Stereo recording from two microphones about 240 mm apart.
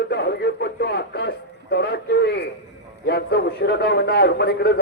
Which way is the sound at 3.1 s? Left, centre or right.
Left.